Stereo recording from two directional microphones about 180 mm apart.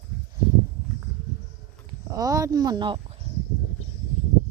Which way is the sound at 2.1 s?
20° right (ahead or behind).